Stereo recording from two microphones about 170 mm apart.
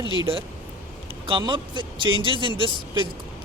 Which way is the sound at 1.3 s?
25° right (ahead or behind).